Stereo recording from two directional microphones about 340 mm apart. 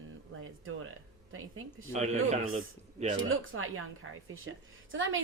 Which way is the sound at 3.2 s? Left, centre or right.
Right.